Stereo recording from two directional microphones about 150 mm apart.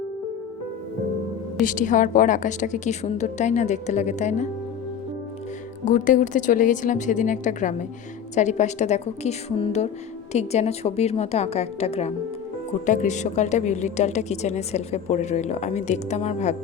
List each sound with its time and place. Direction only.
1.6 s a woman's voice: 60° left (ahead or behind)
5.8 s a woman's voice: 60° left (ahead or behind)
12.8 s a woman's voice: 55° left (ahead or behind)